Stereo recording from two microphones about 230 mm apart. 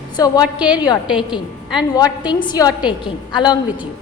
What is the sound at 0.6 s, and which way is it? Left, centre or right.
Speech, centre.